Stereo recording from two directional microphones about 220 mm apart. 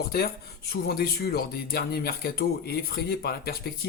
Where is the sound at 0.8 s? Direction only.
45° left (ahead or behind).